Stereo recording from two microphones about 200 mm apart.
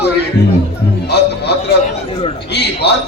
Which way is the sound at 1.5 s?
55° left (ahead or behind).